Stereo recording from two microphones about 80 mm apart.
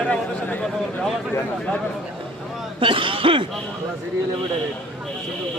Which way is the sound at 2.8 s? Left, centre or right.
Right.